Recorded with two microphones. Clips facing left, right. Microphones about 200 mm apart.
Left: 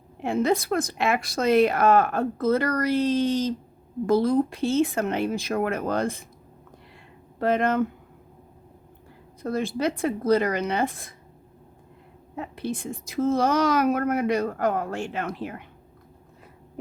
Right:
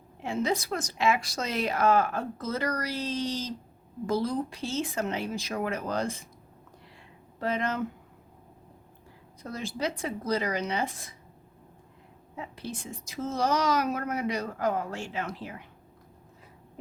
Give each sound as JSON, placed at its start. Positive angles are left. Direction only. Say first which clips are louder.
{"t": 0.2, "sound": "a woman's voice", "louder": "left 6 dB", "side_deg": 55}
{"t": 7.3, "sound": "speech", "louder": "left 7 dB", "side_deg": 55}
{"t": 9.4, "sound": "a woman's voice", "louder": "left 7 dB", "side_deg": 55}
{"t": 12.4, "sound": "a woman's voice", "louder": "left 7 dB", "side_deg": 55}